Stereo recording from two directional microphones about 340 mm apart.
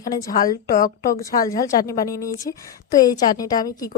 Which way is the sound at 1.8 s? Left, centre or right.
Centre.